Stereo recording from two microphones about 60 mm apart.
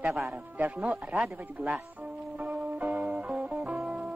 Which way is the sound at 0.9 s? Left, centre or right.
Centre.